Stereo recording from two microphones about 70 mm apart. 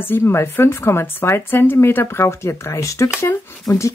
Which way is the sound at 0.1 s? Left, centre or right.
Left.